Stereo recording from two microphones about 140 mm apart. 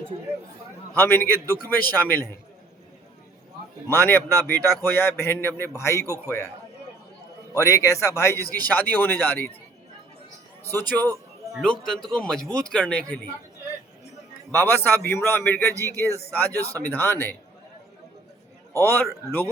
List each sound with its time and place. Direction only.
0.9 s a man's voice: 15° left (ahead or behind)
3.8 s a man's voice: 15° left (ahead or behind)
7.5 s a man's voice: 20° left (ahead or behind)
10.6 s a man's voice: 15° left (ahead or behind)
14.5 s a man's voice: 15° left (ahead or behind)
18.7 s a man's voice: 15° left (ahead or behind)